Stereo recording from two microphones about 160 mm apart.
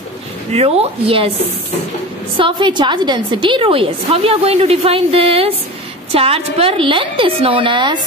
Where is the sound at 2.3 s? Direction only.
30° right (ahead or behind).